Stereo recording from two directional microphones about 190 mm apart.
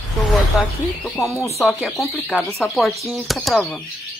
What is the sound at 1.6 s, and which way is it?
Speech, centre (ahead or behind).